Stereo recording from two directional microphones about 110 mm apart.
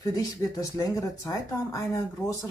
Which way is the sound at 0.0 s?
35° left (ahead or behind).